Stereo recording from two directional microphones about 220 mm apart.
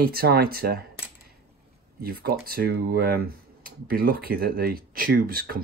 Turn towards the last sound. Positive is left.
turn(degrees=-40)  # may be behind; listen again after turning